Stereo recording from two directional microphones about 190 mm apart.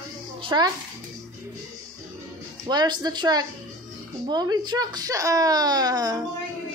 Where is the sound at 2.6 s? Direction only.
20° right (ahead or behind).